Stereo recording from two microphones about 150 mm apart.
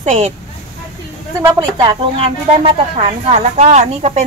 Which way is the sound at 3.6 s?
50° right (ahead or behind).